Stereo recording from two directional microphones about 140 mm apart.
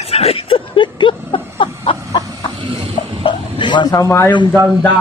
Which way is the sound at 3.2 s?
35° left (ahead or behind).